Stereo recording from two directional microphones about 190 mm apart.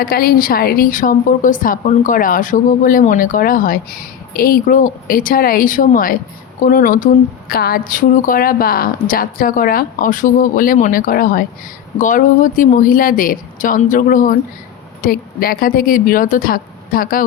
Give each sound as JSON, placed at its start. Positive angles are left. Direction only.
{"t": 0.0, "sound": "a woman's voice", "side_deg": 50}